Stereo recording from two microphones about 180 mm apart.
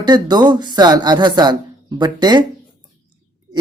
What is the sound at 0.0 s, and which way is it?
Speech, 25° right (ahead or behind).